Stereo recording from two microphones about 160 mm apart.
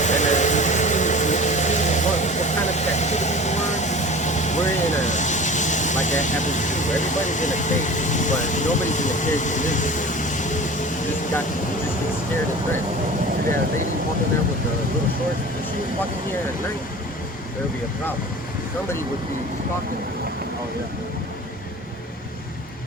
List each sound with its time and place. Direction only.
0.0 s vehicle: 50° left (ahead or behind)